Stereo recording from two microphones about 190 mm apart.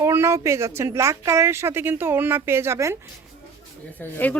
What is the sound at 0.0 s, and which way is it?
Speech, 15° right (ahead or behind).